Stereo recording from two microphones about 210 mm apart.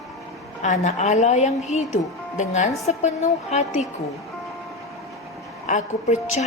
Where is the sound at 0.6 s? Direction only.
35° left (ahead or behind).